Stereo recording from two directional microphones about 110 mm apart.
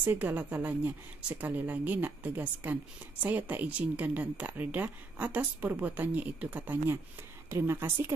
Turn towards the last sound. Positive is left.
turn(degrees=-25)  # may be behind; listen again after turning